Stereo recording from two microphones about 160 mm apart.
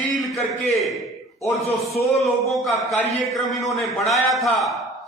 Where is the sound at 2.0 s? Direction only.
Centre (ahead or behind).